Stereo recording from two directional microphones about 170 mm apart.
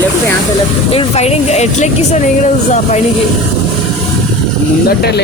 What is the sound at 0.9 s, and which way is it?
Speech, 40° left (ahead or behind).